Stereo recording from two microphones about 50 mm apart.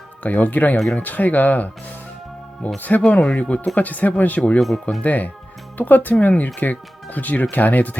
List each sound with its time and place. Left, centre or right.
0.2 s speech: left
2.7 s speech: left
4.6 s speech: centre
5.0 s speech: left